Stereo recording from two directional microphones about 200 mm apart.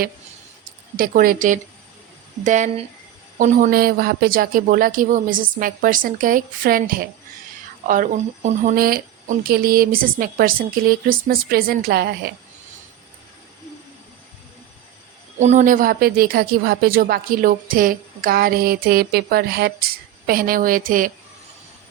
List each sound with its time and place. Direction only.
0.9 s a woman's voice: 45° right (ahead or behind)
15.4 s a woman's voice: 35° right (ahead or behind)